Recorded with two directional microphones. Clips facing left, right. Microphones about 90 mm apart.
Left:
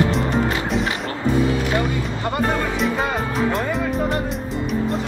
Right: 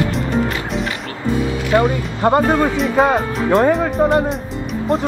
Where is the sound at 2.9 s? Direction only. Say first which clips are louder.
Right 7 dB; 40° right (ahead or behind).